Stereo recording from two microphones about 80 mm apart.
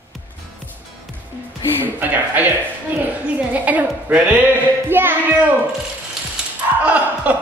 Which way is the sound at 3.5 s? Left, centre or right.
Centre.